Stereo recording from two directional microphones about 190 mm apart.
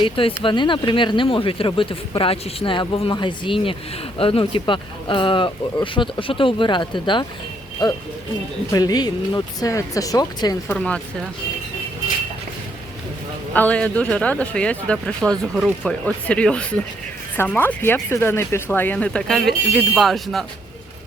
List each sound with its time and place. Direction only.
0.0 s speech: 30° left (ahead or behind)
10.7 s speech: 5° left (ahead or behind)
13.5 s speech: 10° left (ahead or behind)